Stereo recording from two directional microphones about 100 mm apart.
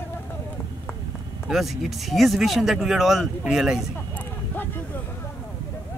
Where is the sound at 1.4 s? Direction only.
Centre (ahead or behind).